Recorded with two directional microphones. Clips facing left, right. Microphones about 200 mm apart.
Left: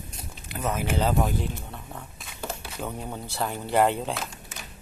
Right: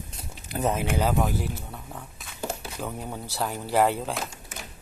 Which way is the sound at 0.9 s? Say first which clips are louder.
Even; 5° right (ahead or behind).